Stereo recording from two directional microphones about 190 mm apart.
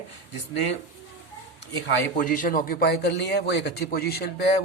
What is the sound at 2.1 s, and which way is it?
A man's voice, 45° left (ahead or behind).